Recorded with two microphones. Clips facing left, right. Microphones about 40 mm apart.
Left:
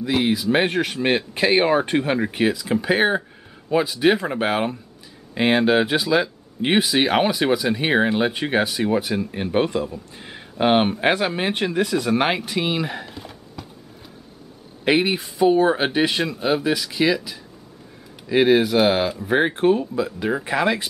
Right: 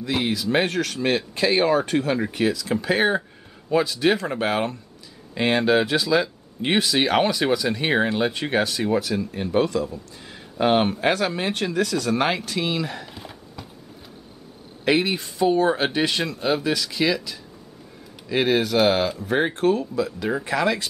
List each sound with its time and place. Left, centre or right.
0.0 s speech: centre
13.1 s a sound: centre
14.9 s speech: centre